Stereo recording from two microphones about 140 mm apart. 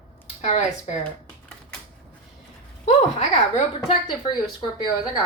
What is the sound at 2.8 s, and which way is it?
Speech, 50° left (ahead or behind).